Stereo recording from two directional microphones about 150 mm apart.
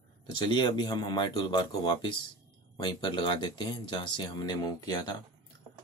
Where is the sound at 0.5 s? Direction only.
30° left (ahead or behind).